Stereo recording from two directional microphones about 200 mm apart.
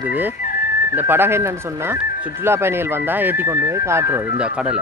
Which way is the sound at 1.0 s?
10° right (ahead or behind).